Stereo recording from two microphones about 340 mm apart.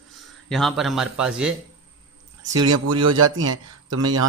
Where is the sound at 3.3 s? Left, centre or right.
Right.